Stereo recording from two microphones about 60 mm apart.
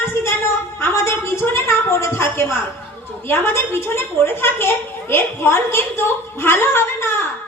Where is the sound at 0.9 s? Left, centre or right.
Left.